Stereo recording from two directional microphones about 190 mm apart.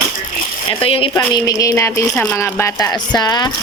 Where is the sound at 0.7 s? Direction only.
30° left (ahead or behind).